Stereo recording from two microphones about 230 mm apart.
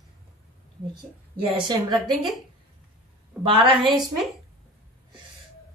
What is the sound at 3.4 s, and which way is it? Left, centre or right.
Speech, right.